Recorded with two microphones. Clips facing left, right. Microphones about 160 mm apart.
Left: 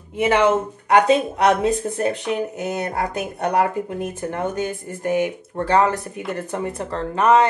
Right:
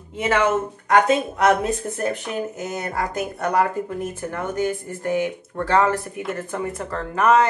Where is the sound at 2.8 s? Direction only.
30° left (ahead or behind).